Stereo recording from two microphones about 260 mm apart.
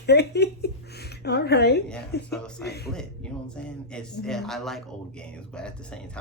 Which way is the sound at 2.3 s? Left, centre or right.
Centre.